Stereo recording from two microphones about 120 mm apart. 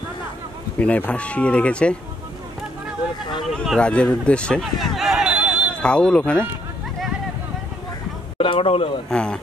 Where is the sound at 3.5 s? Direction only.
5° left (ahead or behind).